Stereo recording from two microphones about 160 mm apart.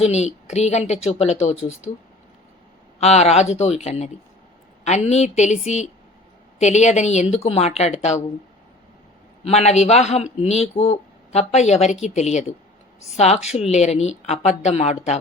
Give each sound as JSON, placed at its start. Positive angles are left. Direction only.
{"t": 0.0, "sound": "speech", "side_deg": 45}
{"t": 3.0, "sound": "speech", "side_deg": 45}
{"t": 9.4, "sound": "speech", "side_deg": 40}